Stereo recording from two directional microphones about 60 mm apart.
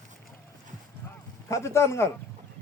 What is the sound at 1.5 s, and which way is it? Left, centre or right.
Speech, left.